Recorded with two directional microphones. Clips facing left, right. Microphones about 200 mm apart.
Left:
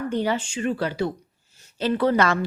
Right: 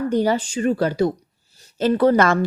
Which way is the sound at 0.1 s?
40° right (ahead or behind).